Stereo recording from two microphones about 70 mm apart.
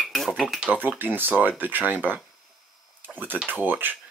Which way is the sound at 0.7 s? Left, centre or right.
Right.